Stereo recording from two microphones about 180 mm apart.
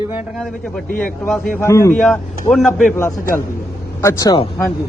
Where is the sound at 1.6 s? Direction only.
15° left (ahead or behind).